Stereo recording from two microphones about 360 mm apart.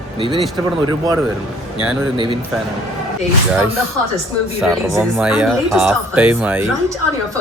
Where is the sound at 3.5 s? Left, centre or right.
Centre.